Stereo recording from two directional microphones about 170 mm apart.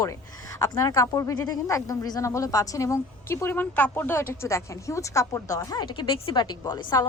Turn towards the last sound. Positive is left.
turn(degrees=25)  # may be behind; listen again after turning